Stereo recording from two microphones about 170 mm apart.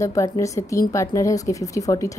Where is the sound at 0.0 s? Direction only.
20° left (ahead or behind).